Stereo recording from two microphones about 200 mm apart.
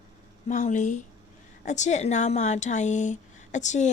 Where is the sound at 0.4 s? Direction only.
35° left (ahead or behind).